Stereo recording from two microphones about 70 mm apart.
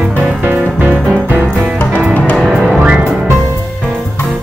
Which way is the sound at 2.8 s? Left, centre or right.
Centre.